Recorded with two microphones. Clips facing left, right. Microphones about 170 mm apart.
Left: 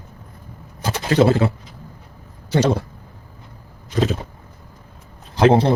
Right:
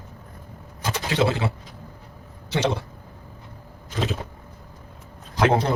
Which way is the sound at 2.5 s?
40° left (ahead or behind).